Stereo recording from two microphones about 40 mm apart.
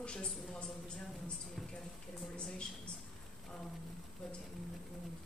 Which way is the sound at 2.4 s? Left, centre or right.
Left.